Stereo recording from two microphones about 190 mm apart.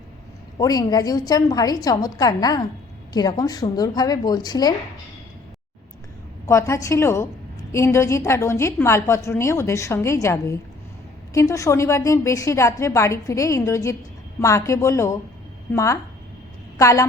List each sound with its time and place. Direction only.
0.6 s a woman's voice: 20° left (ahead or behind)
6.4 s a woman's voice: 15° left (ahead or behind)